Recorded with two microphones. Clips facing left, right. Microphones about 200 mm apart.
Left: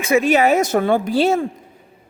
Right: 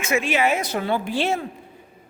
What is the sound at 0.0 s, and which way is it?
A man's voice, 35° left (ahead or behind).